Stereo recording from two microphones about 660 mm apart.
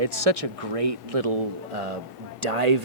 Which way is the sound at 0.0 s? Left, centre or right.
Right.